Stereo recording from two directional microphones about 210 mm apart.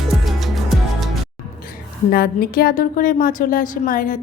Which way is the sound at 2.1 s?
45° left (ahead or behind).